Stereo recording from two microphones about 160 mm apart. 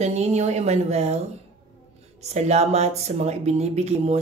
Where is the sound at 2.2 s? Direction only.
45° right (ahead or behind).